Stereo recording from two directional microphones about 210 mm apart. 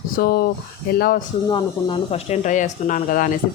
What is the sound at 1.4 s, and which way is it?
Speech, 25° left (ahead or behind).